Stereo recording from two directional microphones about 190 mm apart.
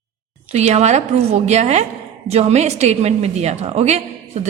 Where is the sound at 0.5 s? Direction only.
35° right (ahead or behind).